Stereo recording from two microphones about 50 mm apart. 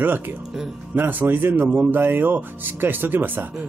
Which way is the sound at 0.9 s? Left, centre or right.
Right.